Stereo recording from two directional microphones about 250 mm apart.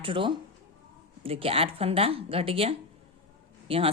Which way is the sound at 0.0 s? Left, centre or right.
Centre.